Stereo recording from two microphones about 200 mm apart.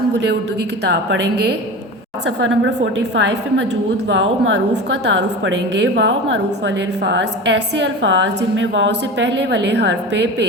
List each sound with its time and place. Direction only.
2.2 s a woman's voice: 70° right (ahead or behind)